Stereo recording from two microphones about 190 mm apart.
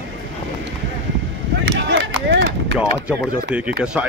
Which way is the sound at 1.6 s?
65° right (ahead or behind).